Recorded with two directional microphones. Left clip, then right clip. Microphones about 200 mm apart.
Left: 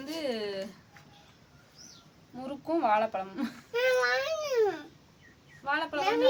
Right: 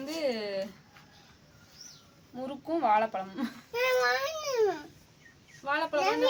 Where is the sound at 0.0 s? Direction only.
Centre (ahead or behind).